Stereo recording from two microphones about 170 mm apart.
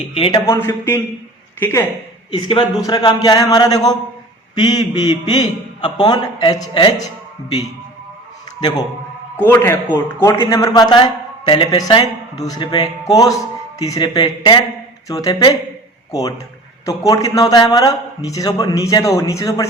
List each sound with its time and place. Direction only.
0.1 s a man's voice: 30° left (ahead or behind)
0.4 s speech: 15° left (ahead or behind)
2.8 s a man's voice: 25° left (ahead or behind)
9.4 s a man's voice: 15° left (ahead or behind)
16.8 s a man's voice: 20° left (ahead or behind)